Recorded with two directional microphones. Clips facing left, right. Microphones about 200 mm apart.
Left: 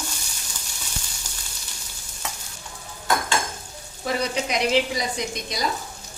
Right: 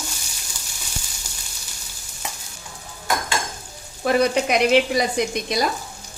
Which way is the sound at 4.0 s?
60° right (ahead or behind).